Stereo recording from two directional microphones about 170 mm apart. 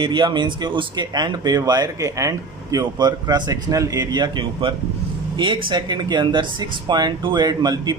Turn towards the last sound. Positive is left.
turn(degrees=-25)  # may be behind; listen again after turning